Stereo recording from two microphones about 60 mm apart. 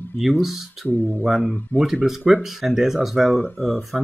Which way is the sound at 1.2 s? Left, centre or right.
Centre.